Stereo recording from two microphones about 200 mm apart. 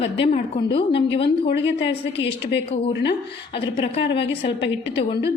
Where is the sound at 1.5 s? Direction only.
60° left (ahead or behind).